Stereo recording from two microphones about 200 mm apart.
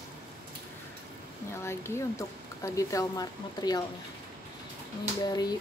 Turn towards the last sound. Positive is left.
turn(degrees=20)  # may be behind; listen again after turning